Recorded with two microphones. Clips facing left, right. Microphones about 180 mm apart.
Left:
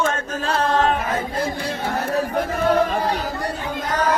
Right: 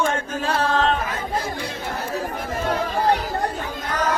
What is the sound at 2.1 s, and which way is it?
Chatter, 65° left (ahead or behind).